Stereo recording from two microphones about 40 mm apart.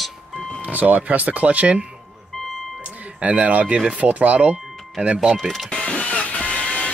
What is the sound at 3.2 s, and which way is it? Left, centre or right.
Speech, right.